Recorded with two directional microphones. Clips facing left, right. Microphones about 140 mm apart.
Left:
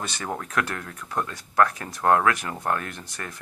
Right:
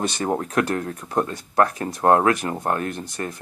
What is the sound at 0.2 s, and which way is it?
Speech, 30° right (ahead or behind).